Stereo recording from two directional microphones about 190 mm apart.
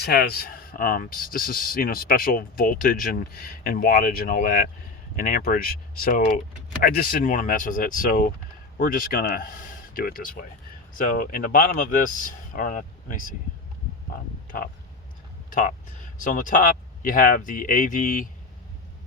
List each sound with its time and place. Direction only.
0.0 s speech: 55° left (ahead or behind)
15.4 s speech: 45° left (ahead or behind)